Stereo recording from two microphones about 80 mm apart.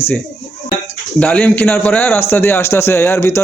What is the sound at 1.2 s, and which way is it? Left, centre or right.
Speech, centre.